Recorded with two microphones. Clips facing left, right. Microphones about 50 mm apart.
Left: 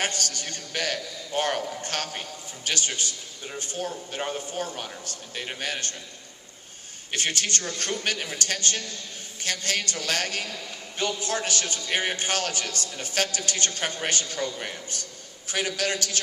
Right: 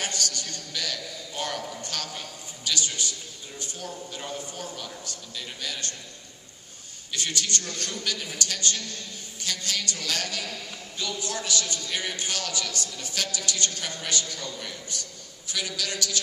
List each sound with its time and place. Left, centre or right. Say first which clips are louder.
0.0 s a man's voice: left 2 dB; left
7.1 s a man's voice: left 2 dB; left